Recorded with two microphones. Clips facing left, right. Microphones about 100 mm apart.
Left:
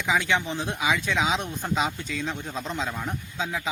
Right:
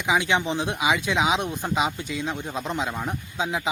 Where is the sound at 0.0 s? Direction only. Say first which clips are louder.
Right 2 dB; 15° right (ahead or behind).